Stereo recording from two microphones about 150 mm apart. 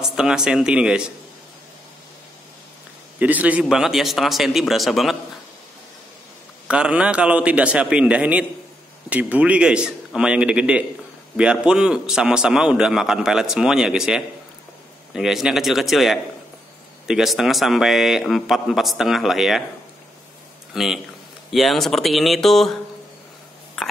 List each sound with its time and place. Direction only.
0.0 s a man's voice: 5° right (ahead or behind)
3.2 s a man's voice: 10° right (ahead or behind)
6.7 s a man's voice: 5° right (ahead or behind)
20.7 s a man's voice: 5° right (ahead or behind)
23.8 s a sound: centre (ahead or behind)